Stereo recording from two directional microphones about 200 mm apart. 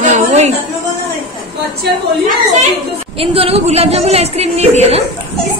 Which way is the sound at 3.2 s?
30° right (ahead or behind).